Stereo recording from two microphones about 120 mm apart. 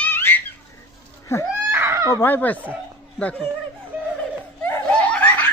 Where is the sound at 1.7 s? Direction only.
25° right (ahead or behind).